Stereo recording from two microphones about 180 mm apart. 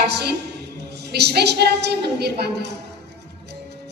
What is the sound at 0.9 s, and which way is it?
A woman's voice, 70° right (ahead or behind).